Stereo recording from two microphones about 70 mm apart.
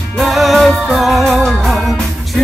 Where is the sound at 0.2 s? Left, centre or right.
Centre.